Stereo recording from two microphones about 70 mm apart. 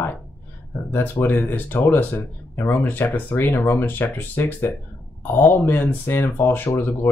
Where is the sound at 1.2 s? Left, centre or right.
Left.